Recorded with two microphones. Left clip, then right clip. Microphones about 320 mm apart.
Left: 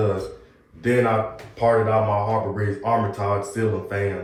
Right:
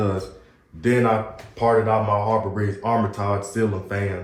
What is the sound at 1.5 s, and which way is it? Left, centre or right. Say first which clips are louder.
Speech: even; right.